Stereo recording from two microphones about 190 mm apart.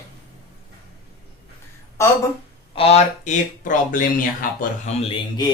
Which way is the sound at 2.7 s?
30° left (ahead or behind).